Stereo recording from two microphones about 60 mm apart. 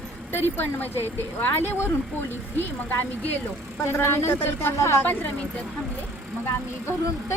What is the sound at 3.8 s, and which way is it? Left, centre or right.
Speech, left.